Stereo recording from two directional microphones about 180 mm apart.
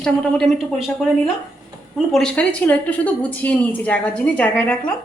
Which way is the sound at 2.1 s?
5° left (ahead or behind).